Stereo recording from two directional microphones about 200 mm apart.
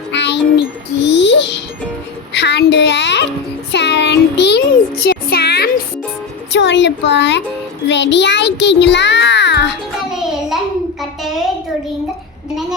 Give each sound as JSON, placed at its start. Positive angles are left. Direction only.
{"t": 0.1, "sound": "music", "side_deg": 60}
{"t": 2.3, "sound": "speech", "side_deg": 55}
{"t": 3.7, "sound": "a sound", "side_deg": 55}
{"t": 7.9, "sound": "a child's voice", "side_deg": 60}
{"t": 10.1, "sound": "child singing", "side_deg": 0}